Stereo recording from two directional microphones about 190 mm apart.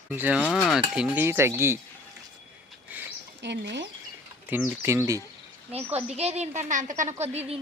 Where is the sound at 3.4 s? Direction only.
65° right (ahead or behind).